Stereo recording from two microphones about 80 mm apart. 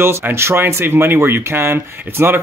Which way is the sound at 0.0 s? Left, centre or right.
Right.